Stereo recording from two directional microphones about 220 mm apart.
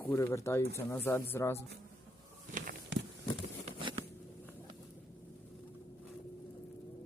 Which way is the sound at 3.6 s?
25° right (ahead or behind).